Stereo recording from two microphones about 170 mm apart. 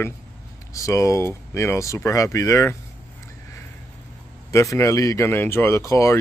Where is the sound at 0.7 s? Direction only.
20° left (ahead or behind).